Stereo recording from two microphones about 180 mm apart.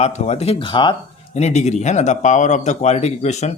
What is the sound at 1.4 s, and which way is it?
Speech, 40° left (ahead or behind).